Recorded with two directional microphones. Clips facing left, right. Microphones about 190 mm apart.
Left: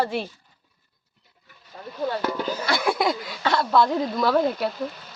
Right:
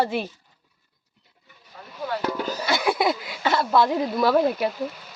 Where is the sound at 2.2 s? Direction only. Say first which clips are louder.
Even; centre (ahead or behind).